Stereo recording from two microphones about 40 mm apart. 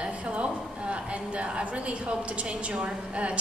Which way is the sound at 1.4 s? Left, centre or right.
Right.